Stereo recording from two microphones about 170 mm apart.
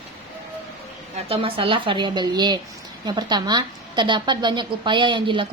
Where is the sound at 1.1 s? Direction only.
35° right (ahead or behind).